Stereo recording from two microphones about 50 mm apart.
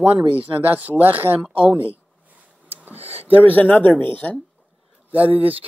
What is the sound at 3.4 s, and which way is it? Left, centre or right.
Speech, left.